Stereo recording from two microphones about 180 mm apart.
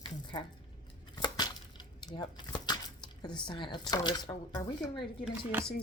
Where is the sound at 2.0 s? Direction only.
25° left (ahead or behind).